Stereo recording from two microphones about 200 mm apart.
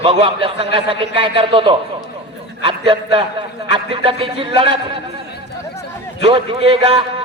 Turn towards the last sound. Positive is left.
turn(degrees=-30)  # may be behind; listen again after turning